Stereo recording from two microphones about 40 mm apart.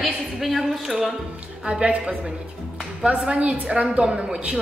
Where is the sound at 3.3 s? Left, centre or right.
Right.